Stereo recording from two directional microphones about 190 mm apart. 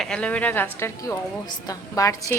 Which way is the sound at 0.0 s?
5° left (ahead or behind).